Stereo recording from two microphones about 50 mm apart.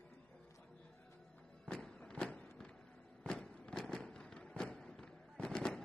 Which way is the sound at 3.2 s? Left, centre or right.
Centre.